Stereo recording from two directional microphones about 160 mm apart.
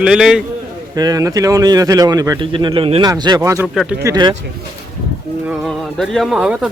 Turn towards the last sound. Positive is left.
turn(degrees=-5)  # may be behind; listen again after turning